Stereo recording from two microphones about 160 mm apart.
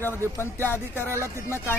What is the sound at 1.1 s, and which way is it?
Speech, 15° right (ahead or behind).